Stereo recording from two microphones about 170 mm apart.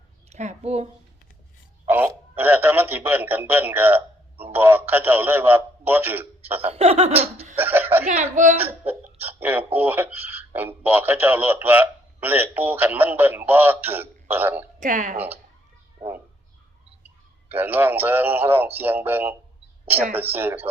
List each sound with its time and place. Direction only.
0.3 s a woman's voice: 40° right (ahead or behind)
1.9 s a sound: 10° right (ahead or behind)
4.5 s speech: 10° right (ahead or behind)
6.6 s laughter: 35° right (ahead or behind)
7.6 s chuckle: 10° right (ahead or behind)
8.0 s speech: 45° right (ahead or behind)
8.8 s speech: 10° right (ahead or behind)
14.8 s speech: 50° right (ahead or behind)
17.6 s speech: 10° right (ahead or behind)